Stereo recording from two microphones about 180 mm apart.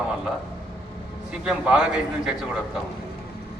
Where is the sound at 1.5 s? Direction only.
5° right (ahead or behind).